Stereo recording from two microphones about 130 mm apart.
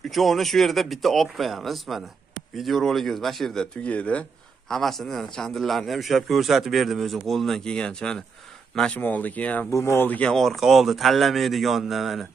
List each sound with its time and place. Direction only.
0.1 s speech: centre (ahead or behind)
9.7 s speech: 25° left (ahead or behind); by 12.3 s centre (ahead or behind)